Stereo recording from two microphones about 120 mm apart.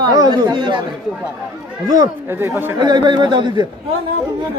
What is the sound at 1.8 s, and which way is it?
Speech, 30° right (ahead or behind).